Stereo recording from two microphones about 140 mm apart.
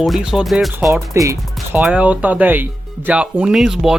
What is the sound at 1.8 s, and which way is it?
Speech, 10° right (ahead or behind).